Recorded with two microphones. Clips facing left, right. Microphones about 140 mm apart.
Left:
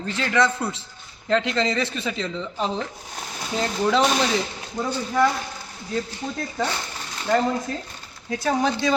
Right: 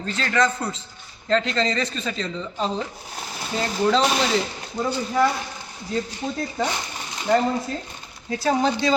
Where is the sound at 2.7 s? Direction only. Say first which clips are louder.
Even; 5° right (ahead or behind).